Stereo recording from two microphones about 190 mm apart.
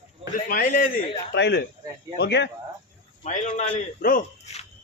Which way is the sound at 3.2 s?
40° left (ahead or behind).